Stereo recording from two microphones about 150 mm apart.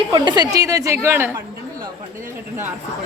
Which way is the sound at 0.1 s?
30° right (ahead or behind).